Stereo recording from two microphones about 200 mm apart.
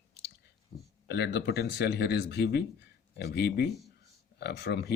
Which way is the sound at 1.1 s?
55° left (ahead or behind).